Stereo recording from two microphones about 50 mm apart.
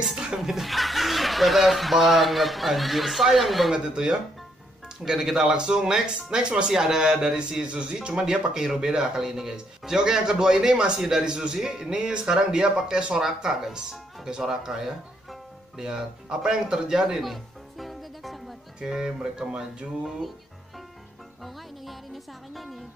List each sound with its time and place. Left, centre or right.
0.1 s speech: centre
3.7 s speech: centre
16.7 s music: centre
18.8 s speech: centre
21.8 s speech: centre